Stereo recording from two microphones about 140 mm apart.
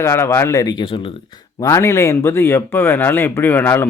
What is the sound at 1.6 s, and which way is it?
Speech, 20° left (ahead or behind).